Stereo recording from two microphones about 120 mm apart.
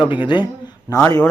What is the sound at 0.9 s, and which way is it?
Speech, 25° left (ahead or behind).